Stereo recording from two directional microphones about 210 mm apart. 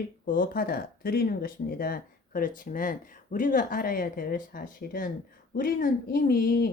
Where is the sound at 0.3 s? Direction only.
40° left (ahead or behind).